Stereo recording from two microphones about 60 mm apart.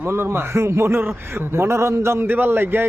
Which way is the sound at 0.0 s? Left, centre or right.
Right.